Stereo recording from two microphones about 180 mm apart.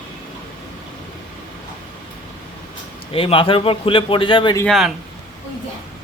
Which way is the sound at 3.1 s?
30° left (ahead or behind).